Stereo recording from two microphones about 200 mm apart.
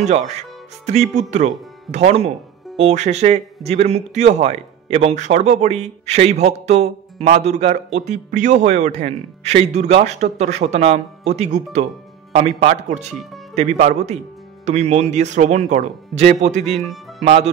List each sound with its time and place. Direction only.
0.0 s a man's voice: 35° right (ahead or behind)
16.6 s speech: centre (ahead or behind)
17.2 s speech: 30° right (ahead or behind)